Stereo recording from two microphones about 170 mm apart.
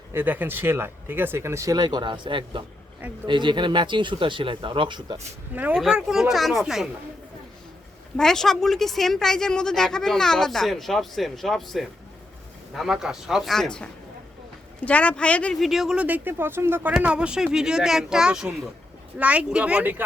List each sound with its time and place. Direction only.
0.1 s speech: 10° right (ahead or behind)
5.5 s speech: 5° right (ahead or behind)
8.1 s speech: 5° left (ahead or behind)